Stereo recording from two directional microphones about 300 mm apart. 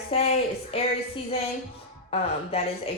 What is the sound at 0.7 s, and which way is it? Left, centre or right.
Speech, centre.